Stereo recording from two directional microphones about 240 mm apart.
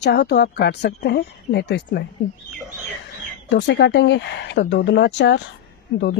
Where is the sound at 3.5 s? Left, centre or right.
Left.